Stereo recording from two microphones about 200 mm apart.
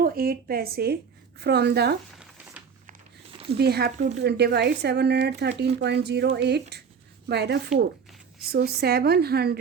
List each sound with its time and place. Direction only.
0.0 s a woman's voice: 50° right (ahead or behind)
3.6 s a woman's voice: 55° right (ahead or behind)